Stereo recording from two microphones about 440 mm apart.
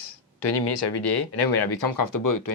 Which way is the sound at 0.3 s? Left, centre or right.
Left.